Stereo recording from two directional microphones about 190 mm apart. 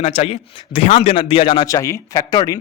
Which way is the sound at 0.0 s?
35° left (ahead or behind).